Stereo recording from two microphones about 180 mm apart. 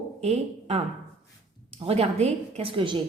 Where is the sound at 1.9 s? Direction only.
35° right (ahead or behind).